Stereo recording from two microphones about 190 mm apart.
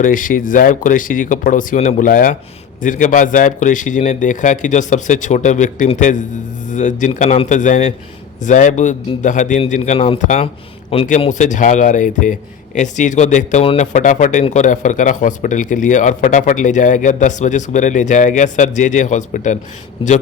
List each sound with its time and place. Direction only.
0.0 s a man's voice: 45° left (ahead or behind)
20.0 s a man's voice: 30° left (ahead or behind)